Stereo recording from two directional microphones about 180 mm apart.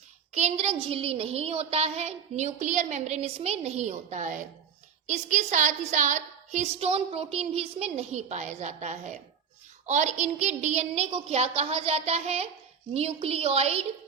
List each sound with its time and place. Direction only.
0.3 s a woman's voice: 35° right (ahead or behind)